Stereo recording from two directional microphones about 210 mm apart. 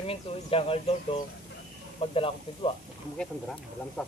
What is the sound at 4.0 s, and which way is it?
Speech, centre (ahead or behind).